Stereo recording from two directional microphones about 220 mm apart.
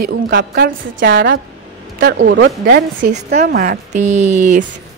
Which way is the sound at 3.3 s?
35° right (ahead or behind).